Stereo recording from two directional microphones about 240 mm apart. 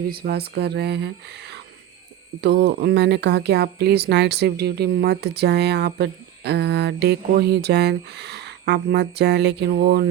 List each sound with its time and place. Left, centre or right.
0.1 s speech: right